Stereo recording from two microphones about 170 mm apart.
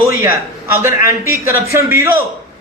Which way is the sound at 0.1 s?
15° right (ahead or behind).